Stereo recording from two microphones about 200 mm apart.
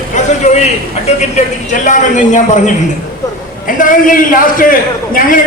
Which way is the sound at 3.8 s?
45° left (ahead or behind).